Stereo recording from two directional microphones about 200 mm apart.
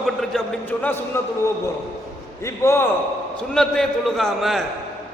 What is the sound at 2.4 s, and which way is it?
Speech, 15° left (ahead or behind).